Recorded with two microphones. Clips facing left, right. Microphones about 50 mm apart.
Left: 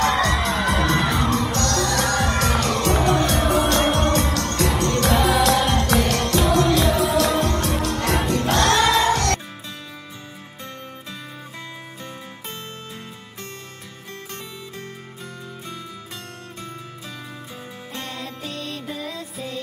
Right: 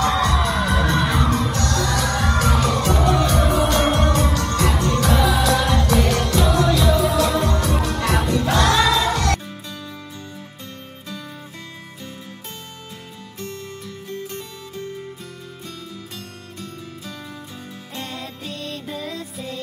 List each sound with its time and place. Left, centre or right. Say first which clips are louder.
0.0 s music: even; left
17.9 s music: right 1 dB; centre